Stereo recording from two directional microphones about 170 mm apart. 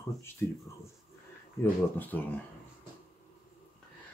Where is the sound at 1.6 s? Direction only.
10° left (ahead or behind).